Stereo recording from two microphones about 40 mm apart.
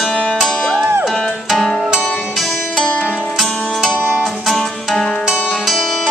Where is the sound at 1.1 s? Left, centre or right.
Centre.